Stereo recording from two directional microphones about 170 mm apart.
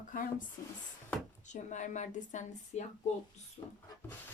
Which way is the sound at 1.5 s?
45° left (ahead or behind).